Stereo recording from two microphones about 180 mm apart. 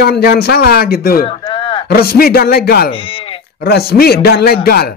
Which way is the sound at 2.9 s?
30° left (ahead or behind).